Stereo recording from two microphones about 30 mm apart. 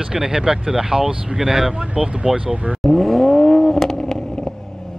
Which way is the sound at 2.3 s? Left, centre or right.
Right.